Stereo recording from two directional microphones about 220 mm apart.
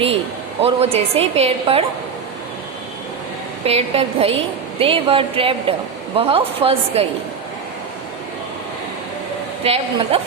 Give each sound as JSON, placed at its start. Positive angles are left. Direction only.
{"t": 0.6, "sound": "a woman's voice", "side_deg": -25}
{"t": 3.6, "sound": "a woman's voice", "side_deg": -25}
{"t": 9.6, "sound": "a woman's voice", "side_deg": -25}